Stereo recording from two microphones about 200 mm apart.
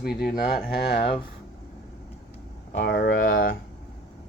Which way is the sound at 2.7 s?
55° left (ahead or behind).